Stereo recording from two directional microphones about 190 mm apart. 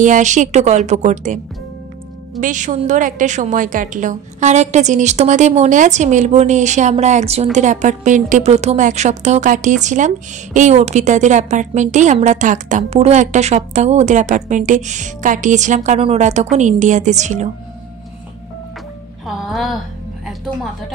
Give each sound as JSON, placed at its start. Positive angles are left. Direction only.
{"t": 0.0, "sound": "a woman's voice", "side_deg": -40}
{"t": 2.4, "sound": "a woman's voice", "side_deg": -40}
{"t": 19.2, "sound": "music", "side_deg": 0}